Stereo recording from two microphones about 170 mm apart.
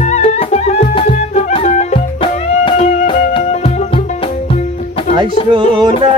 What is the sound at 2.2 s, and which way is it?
Music, 30° left (ahead or behind).